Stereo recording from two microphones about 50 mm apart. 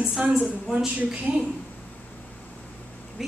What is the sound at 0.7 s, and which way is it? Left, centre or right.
Speech, right.